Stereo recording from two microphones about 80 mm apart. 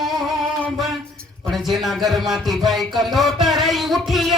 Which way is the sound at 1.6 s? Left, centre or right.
Centre.